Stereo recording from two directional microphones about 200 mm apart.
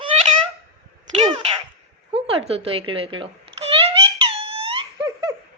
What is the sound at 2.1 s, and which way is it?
A woman's voice, 25° right (ahead or behind).